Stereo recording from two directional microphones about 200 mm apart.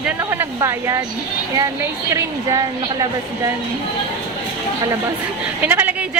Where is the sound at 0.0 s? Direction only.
10° right (ahead or behind).